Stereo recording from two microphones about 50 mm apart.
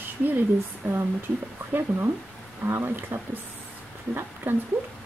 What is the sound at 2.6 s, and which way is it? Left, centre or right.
Speech, right.